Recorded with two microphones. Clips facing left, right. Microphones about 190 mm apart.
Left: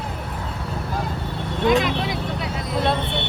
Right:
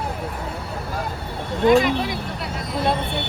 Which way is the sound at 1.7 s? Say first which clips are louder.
Right 3 dB; centre (ahead or behind).